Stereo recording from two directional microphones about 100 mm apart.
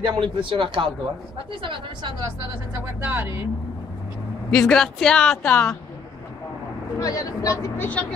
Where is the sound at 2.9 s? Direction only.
20° right (ahead or behind).